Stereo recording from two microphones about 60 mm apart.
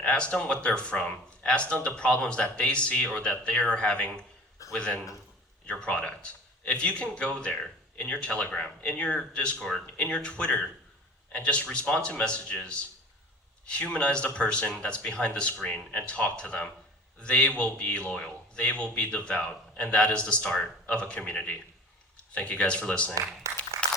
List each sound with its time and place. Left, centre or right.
0.0 s a man's voice: centre
23.4 s applause: right